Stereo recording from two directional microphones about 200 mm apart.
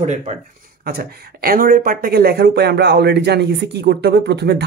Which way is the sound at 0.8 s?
50° right (ahead or behind).